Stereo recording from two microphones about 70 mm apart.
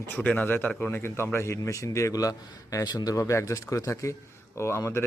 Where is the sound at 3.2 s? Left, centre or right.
Left.